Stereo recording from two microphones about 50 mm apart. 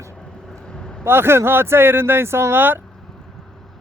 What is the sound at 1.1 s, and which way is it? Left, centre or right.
Speech, right.